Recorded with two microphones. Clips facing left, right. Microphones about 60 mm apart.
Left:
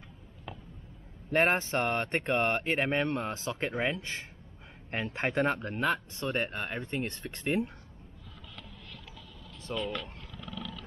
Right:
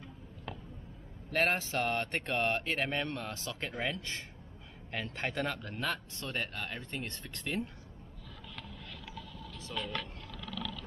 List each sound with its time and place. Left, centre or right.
1.3 s speech: left
9.7 s speech: left